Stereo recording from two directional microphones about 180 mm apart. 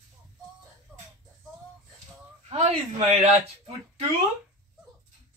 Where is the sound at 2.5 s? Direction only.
40° right (ahead or behind).